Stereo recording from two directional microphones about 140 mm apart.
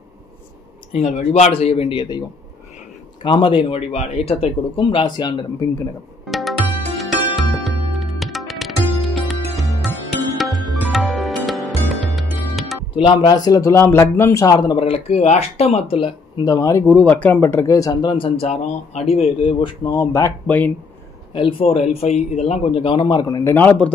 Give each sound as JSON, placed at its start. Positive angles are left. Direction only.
{"t": 0.9, "sound": "speech", "side_deg": 50}
{"t": 6.2, "sound": "music", "side_deg": 0}
{"t": 12.9, "sound": "a man's voice", "side_deg": 40}
{"t": 14.8, "sound": "speech", "side_deg": 45}
{"t": 16.4, "sound": "speech", "side_deg": 25}
{"t": 18.1, "sound": "speech", "side_deg": 40}
{"t": 21.3, "sound": "speech", "side_deg": 40}